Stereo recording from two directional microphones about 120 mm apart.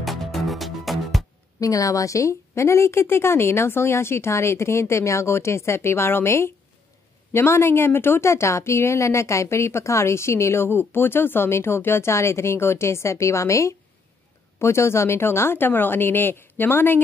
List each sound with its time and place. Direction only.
0.0 s music: centre (ahead or behind)
1.6 s a woman's voice: 30° left (ahead or behind)